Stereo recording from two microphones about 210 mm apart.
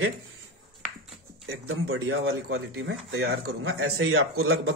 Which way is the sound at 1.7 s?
75° right (ahead or behind).